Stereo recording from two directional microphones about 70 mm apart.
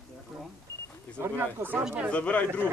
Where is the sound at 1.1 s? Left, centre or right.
Right.